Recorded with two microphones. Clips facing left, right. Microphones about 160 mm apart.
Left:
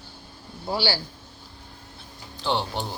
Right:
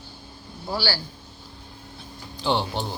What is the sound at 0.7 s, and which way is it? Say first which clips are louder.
Speech: left 2 dB; 25° left (ahead or behind).